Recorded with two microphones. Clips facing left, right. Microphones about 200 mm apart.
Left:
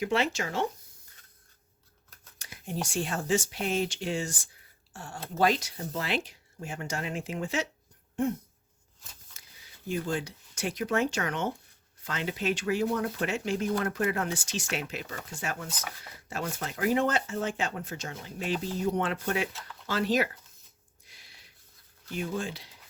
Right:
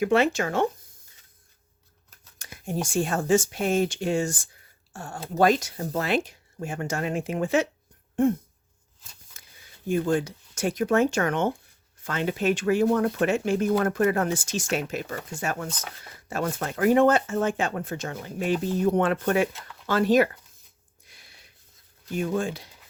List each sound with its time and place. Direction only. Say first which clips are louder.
0.0 s speech: right 7 dB; 55° right (ahead or behind)
2.4 s speech: right 5 dB; 50° right (ahead or behind)
8.1 s a sound: right 7 dB; 55° right (ahead or behind)
9.8 s speech: right 7 dB; 50° right (ahead or behind)
21.1 s a sound: right 3 dB; 55° right (ahead or behind)
22.1 s speech: right 6 dB; 50° right (ahead or behind)